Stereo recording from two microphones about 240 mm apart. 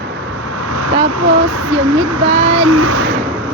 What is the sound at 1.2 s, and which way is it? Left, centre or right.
Speech, right.